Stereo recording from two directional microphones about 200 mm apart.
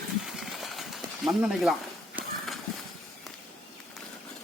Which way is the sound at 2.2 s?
Centre (ahead or behind).